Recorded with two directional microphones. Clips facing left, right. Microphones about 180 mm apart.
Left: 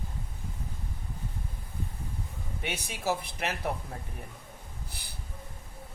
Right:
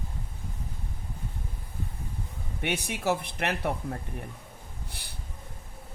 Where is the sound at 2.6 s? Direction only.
60° right (ahead or behind).